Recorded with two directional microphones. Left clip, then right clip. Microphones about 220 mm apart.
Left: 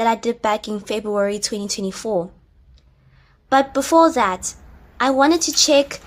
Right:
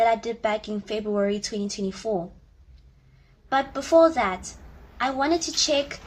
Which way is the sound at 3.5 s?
50° left (ahead or behind).